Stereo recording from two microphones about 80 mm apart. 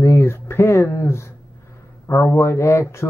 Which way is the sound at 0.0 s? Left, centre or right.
Left.